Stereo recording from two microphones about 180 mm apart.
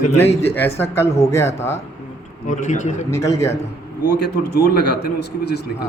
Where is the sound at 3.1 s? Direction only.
15° left (ahead or behind).